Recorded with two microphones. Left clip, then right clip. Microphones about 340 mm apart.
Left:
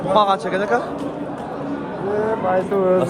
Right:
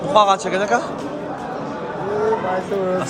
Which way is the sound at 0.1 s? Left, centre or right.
Centre.